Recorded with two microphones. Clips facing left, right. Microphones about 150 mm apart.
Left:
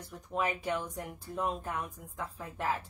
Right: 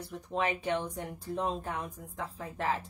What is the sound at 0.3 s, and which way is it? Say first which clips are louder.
A woman's voice: right 2 dB; 30° right (ahead or behind).